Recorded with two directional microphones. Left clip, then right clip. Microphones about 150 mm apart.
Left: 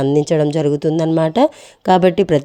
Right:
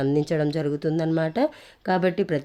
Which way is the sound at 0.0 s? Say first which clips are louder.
Left 9 dB; 40° left (ahead or behind).